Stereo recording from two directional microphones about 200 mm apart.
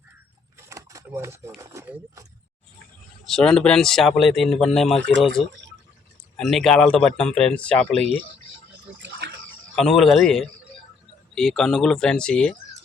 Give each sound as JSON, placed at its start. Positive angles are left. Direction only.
{"t": 0.7, "sound": "speech", "side_deg": -15}
{"t": 3.2, "sound": "speech", "side_deg": 0}
{"t": 9.0, "sound": "a sound", "side_deg": -65}
{"t": 9.7, "sound": "speech", "side_deg": 0}